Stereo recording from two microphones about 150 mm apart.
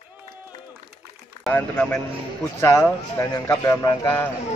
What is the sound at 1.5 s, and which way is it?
Speech, 10° left (ahead or behind).